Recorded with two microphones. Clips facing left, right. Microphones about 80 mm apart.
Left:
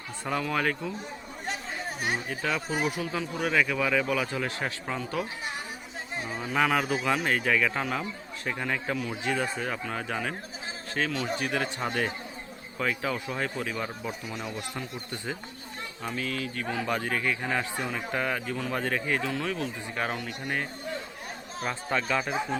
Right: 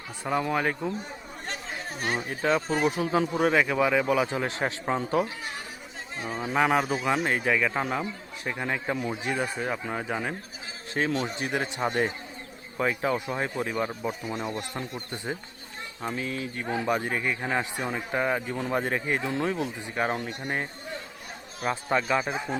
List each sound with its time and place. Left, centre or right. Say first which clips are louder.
0.3 s speech: right 2 dB; centre
2.4 s speech: right 6 dB; right
3.1 s speech: right 6 dB; right
6.3 s speech: right 2 dB; right
11.0 s speech: right 2 dB; right
14.3 s speech: right 4 dB; right
15.1 s speech: right 1 dB; right